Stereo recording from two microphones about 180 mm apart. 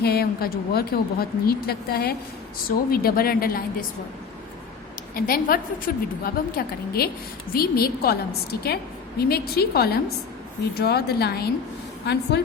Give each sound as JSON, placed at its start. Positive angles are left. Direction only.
{"t": 0.0, "sound": "speech", "side_deg": 60}
{"t": 5.1, "sound": "speech", "side_deg": 55}